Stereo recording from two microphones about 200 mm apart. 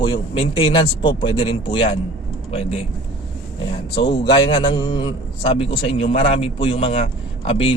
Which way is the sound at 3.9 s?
60° left (ahead or behind).